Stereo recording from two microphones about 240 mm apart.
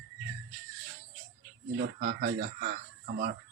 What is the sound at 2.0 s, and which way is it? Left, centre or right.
Speech, right.